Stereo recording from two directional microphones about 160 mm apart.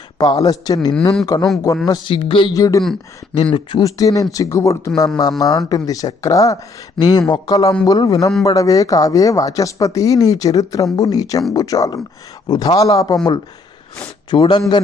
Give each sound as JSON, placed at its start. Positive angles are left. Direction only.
{"t": 0.2, "sound": "speech", "side_deg": 25}
{"t": 2.5, "sound": "speech", "side_deg": 20}
{"t": 14.3, "sound": "speech", "side_deg": 30}